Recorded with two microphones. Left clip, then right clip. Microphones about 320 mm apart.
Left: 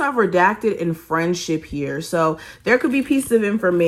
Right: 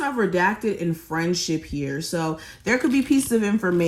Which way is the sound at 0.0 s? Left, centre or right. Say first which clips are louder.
Left 5 dB; centre.